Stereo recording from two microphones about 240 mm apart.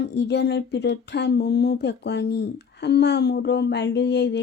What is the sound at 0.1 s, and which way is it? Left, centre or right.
Speech, left.